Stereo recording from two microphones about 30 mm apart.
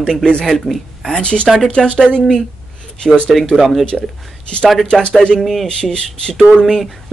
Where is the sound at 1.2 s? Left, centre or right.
Left.